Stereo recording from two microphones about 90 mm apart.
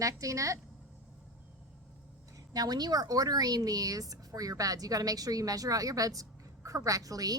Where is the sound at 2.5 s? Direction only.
45° right (ahead or behind).